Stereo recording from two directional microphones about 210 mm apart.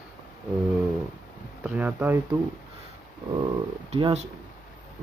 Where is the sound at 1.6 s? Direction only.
10° right (ahead or behind).